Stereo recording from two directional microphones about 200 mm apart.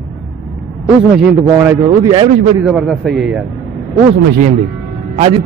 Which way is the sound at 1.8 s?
25° right (ahead or behind).